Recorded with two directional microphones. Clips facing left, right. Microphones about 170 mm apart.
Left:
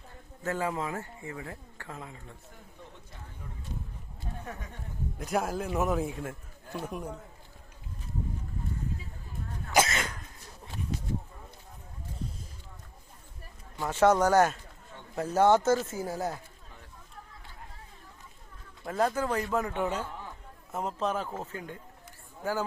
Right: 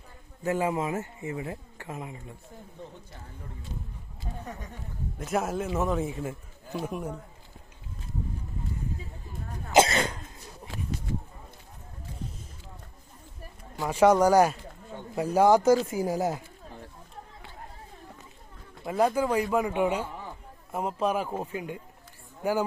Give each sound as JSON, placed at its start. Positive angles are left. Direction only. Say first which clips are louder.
{"t": 0.4, "sound": "speech", "louder": "right 4 dB", "side_deg": -15}
{"t": 5.1, "sound": "a man's voice", "louder": "right 2 dB", "side_deg": 0}
{"t": 9.7, "sound": "cough", "louder": "right 5 dB", "side_deg": -30}
{"t": 13.7, "sound": "speech", "louder": "right 3 dB", "side_deg": -10}
{"t": 16.6, "sound": "a sound", "louder": "right 9 dB", "side_deg": -35}
{"t": 18.9, "sound": "speech", "louder": "right 4 dB", "side_deg": -10}